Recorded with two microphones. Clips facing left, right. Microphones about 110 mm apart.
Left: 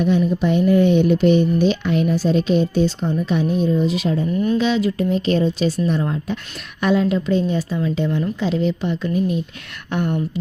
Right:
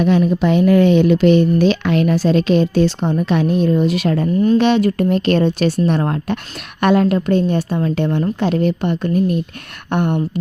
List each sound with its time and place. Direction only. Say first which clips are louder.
0.0 s a woman's voice: right 3 dB; 85° right; by 10.2 s 55° right (ahead or behind)